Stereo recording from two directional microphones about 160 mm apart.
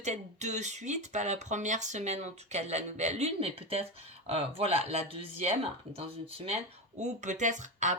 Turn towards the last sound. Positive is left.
turn(degrees=-50)  # may be behind; listen again after turning